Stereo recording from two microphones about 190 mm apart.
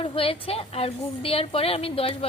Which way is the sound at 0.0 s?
30° left (ahead or behind).